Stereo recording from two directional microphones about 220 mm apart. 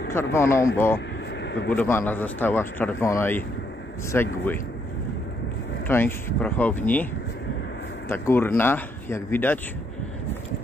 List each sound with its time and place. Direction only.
0.1 s speech: 10° left (ahead or behind)
0.9 s vehicle: 50° left (ahead or behind)
1.7 s speech: 10° left (ahead or behind)
5.9 s speech: 10° left (ahead or behind)
8.1 s speech: 10° left (ahead or behind)